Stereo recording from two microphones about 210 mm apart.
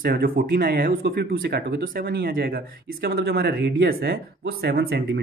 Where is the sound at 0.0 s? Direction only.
45° right (ahead or behind).